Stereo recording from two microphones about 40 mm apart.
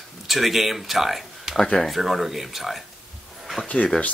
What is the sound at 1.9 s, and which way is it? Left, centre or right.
Speech, centre.